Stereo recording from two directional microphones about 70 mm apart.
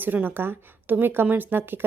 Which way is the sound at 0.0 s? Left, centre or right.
Right.